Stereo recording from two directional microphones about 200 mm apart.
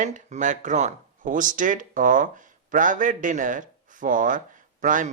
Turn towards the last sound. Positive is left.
turn(degrees=-40)  # may be behind; listen again after turning